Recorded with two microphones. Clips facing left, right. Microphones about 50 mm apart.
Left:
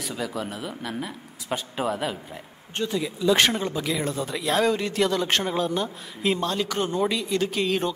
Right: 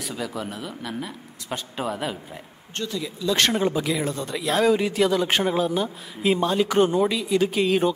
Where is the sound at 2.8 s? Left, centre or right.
Left.